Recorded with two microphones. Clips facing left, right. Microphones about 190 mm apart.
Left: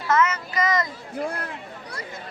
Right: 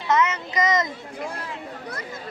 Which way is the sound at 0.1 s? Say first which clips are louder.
Even; 20° right (ahead or behind).